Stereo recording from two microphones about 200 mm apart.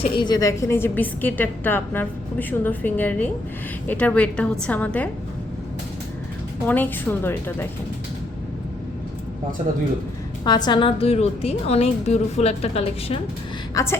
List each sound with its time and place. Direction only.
0.0 s a woman's voice: 20° left (ahead or behind)
6.7 s a woman's voice: 10° left (ahead or behind)
10.4 s a woman's voice: 20° left (ahead or behind)
13.7 s a woman's voice: 15° left (ahead or behind)